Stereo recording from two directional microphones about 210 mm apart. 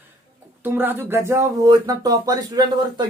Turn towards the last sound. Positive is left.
turn(degrees=-20)  # may be behind; listen again after turning